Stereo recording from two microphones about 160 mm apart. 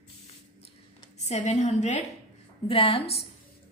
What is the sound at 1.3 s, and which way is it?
Speech, 45° left (ahead or behind).